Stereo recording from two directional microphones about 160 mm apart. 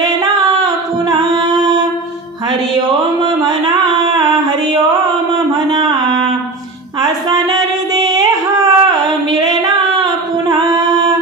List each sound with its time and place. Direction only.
1.0 s singing: 25° right (ahead or behind)
2.7 s music: 25° right (ahead or behind)
5.7 s music: 25° right (ahead or behind)
8.1 s singing: 20° right (ahead or behind)